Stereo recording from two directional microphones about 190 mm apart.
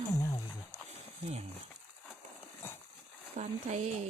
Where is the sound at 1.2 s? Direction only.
35° right (ahead or behind).